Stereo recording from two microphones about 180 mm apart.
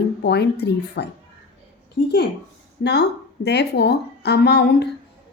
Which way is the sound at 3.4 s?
65° left (ahead or behind).